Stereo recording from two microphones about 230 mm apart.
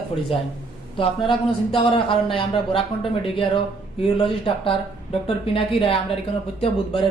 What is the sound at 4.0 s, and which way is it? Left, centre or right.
A man's voice, left.